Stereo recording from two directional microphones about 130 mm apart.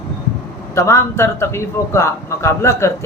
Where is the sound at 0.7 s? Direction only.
20° left (ahead or behind).